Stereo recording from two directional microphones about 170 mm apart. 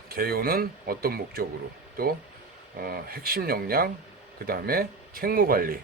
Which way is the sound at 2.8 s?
60° right (ahead or behind).